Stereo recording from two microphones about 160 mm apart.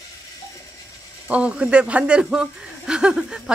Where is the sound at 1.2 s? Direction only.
10° right (ahead or behind).